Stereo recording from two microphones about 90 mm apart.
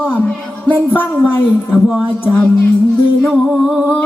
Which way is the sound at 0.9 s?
20° left (ahead or behind).